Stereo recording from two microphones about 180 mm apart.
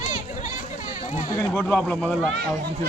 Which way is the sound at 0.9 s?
45° left (ahead or behind).